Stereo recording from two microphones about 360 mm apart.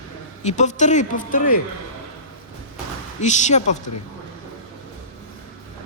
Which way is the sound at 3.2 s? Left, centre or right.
Centre.